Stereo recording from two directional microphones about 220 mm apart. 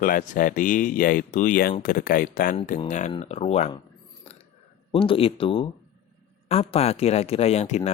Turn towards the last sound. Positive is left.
turn(degrees=30)  # may be behind; listen again after turning